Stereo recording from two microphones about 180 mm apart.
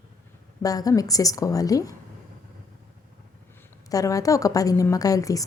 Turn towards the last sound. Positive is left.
turn(degrees=20)  # may be behind; listen again after turning